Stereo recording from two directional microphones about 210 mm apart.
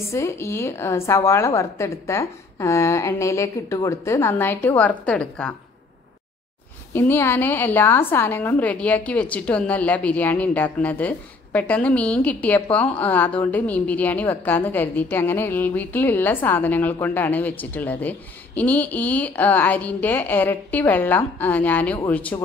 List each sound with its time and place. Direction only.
0.1 s a woman's voice: 15° left (ahead or behind)
6.9 s a woman's voice: 10° left (ahead or behind)